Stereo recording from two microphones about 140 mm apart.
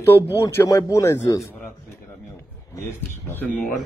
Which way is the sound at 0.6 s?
25° left (ahead or behind).